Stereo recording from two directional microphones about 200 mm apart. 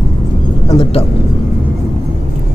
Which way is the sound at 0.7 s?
25° left (ahead or behind).